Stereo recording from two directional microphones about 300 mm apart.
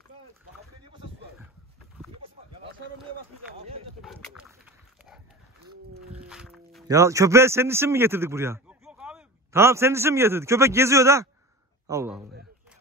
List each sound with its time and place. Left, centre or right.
3.5 s a sound: centre
4.0 s dog: centre
6.1 s music: centre
6.9 s a man's voice: centre